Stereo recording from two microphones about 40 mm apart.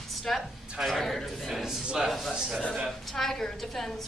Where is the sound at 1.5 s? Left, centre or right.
Centre.